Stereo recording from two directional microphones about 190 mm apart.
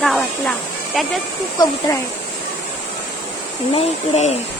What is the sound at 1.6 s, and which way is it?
Speech, 20° left (ahead or behind).